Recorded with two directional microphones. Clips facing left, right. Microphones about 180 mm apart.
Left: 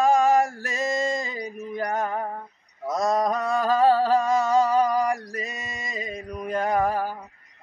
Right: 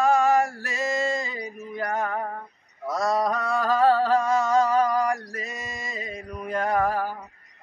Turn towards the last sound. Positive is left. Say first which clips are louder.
# left 1 dB
turn(degrees=15)  # may be behind; listen again after turning